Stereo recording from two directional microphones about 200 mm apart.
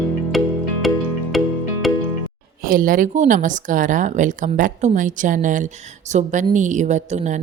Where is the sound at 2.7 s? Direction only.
45° right (ahead or behind).